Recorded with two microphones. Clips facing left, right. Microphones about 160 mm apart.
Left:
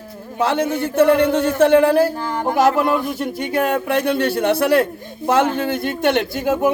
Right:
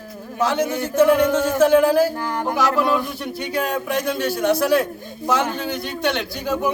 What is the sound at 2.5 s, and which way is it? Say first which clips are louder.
A man's voice: left 4 dB; 50° left (ahead or behind).